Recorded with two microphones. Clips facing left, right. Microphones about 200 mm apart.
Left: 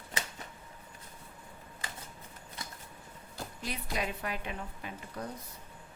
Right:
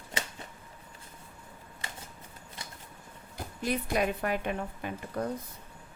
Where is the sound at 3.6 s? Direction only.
55° right (ahead or behind).